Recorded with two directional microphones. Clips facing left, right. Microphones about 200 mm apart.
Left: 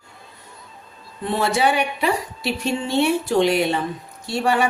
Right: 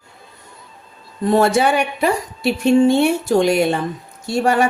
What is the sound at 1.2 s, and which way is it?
Speech, 45° right (ahead or behind).